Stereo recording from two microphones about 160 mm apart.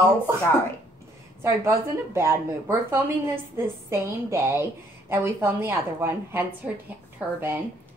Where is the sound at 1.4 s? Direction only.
15° right (ahead or behind).